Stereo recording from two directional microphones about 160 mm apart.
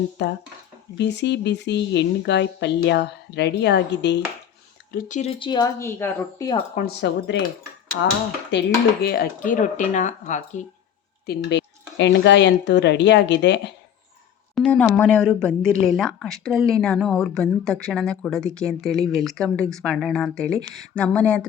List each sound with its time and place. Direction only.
0.2 s speech: 90° left
4.9 s speech: 55° left (ahead or behind); by 6.5 s 15° left (ahead or behind)
6.7 s speech: 70° left (ahead or behind)
7.9 s speech: 90° left
9.6 s speech: 50° left (ahead or behind)
11.3 s speech: 90° left
14.5 s speech: 5° left (ahead or behind)